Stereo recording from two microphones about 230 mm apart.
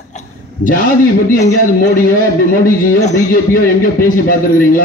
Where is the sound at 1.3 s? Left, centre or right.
Left.